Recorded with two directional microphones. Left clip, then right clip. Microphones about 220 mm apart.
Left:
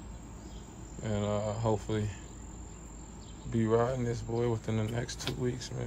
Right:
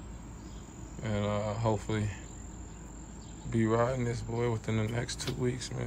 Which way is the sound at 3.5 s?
15° left (ahead or behind).